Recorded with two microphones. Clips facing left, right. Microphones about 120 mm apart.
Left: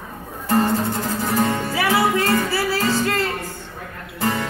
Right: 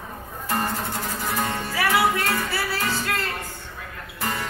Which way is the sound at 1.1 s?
30° left (ahead or behind).